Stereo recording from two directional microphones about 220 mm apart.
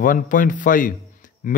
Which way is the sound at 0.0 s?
40° left (ahead or behind).